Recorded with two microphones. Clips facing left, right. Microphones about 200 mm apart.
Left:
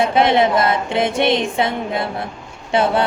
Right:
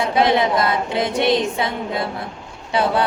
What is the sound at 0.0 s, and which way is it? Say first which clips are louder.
A woman's voice: left 2 dB; 25° left (ahead or behind).